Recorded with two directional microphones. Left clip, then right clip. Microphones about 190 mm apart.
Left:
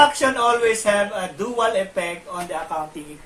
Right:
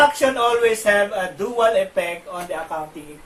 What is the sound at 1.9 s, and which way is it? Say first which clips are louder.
Speech: right 2 dB; 15° left (ahead or behind).